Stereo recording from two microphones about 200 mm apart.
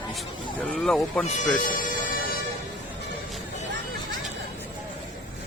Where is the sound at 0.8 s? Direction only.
5° left (ahead or behind).